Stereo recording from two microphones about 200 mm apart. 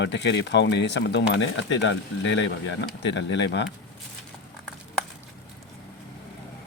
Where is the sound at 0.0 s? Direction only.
60° left (ahead or behind).